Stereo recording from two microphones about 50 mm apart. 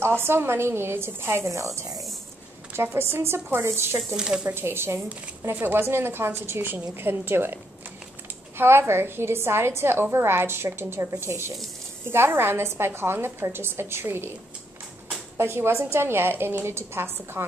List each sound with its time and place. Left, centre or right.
0.0 s speech: right
2.7 s speech: right
3.3 s a woman's voice: right
3.6 s speech: right
4.2 s speech: centre
4.5 s a woman's voice: right
5.5 s a woman's voice: right
8.5 s a woman's voice: right
15.3 s a woman's voice: right